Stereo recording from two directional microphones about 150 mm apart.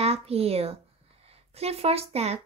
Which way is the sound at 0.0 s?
40° right (ahead or behind).